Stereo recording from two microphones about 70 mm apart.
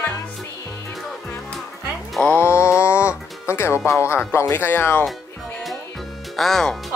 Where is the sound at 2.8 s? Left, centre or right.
Left.